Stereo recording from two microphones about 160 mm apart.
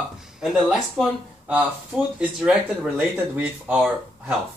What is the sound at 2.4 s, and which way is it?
Speech, 5° right (ahead or behind).